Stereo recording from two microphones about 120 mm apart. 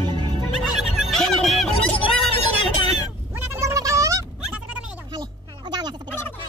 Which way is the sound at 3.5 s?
25° right (ahead or behind).